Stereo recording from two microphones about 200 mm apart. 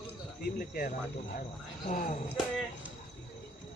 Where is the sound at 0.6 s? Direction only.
45° left (ahead or behind).